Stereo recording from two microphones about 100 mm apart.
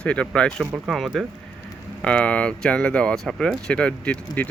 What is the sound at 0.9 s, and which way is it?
Speech, centre (ahead or behind).